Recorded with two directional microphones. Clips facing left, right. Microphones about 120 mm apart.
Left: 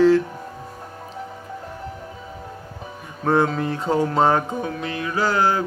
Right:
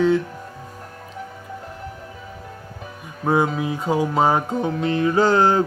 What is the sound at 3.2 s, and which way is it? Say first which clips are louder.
Speech: even; 5° right (ahead or behind).